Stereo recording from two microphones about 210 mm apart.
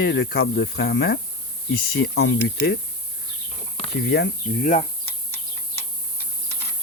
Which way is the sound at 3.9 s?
55° left (ahead or behind).